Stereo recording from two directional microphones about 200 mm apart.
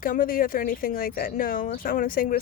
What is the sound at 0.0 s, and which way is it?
Speech, 45° left (ahead or behind).